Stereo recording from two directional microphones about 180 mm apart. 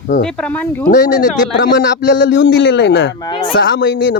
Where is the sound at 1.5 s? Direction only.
85° left.